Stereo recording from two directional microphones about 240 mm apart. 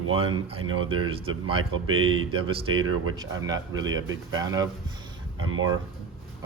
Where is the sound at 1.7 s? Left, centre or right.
Right.